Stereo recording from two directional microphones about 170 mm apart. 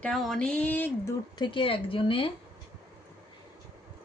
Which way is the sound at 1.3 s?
30° left (ahead or behind).